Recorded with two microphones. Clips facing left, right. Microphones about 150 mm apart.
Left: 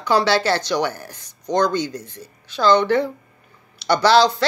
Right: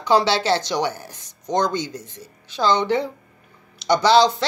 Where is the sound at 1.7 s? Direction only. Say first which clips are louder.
Left 3 dB; 60° left (ahead or behind).